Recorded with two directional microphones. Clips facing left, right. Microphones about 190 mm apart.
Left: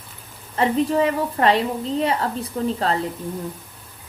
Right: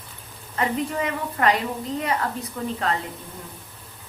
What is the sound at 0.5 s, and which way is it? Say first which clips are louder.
A woman's voice: left 6 dB; 30° left (ahead or behind).